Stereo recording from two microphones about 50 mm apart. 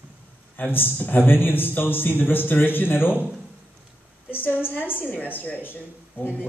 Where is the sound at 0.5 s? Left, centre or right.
Left.